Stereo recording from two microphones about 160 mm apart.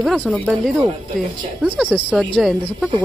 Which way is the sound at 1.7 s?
5° right (ahead or behind).